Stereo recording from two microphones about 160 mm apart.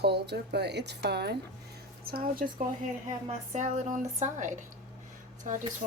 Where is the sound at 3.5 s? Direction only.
50° right (ahead or behind).